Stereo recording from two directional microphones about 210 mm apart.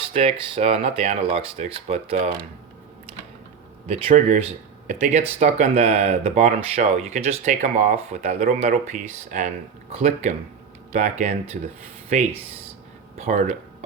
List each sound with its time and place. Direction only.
0.1 s speech: 25° right (ahead or behind)
3.8 s speech: 35° right (ahead or behind)